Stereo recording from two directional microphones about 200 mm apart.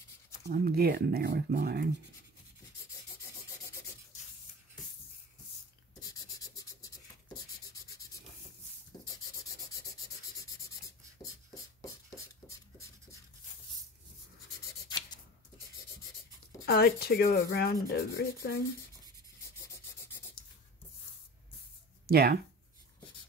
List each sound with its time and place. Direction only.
0.5 s speech: 50° right (ahead or behind)
6.0 s scratch: 20° left (ahead or behind)
12.4 s writing: 15° left (ahead or behind)
16.6 s speech: 50° left (ahead or behind)
22.0 s speech: 50° right (ahead or behind)